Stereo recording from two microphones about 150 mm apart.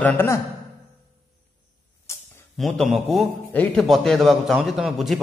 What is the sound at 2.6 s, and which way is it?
Speech, centre (ahead or behind).